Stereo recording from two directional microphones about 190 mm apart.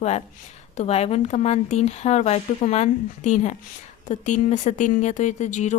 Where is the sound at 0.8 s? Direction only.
30° left (ahead or behind).